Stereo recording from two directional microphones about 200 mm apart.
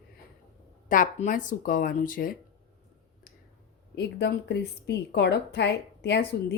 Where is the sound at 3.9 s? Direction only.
55° left (ahead or behind).